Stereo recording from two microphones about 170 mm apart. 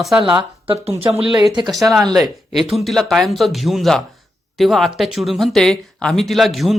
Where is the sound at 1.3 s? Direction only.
25° right (ahead or behind).